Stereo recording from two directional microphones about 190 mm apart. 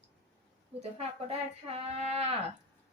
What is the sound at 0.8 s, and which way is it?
A woman's voice, 35° right (ahead or behind).